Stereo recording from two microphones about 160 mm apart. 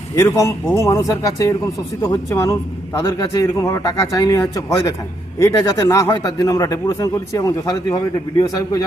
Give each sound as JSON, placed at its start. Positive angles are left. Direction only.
{"t": 0.2, "sound": "a man's voice", "side_deg": 15}